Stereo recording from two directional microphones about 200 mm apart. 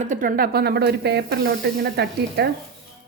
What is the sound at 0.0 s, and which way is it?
A woman's voice, 40° right (ahead or behind).